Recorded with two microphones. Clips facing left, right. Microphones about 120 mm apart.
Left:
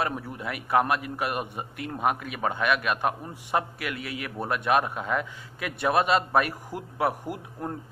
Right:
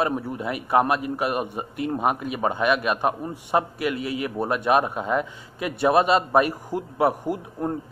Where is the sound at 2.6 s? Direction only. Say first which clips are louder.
Right 3 dB; 35° right (ahead or behind).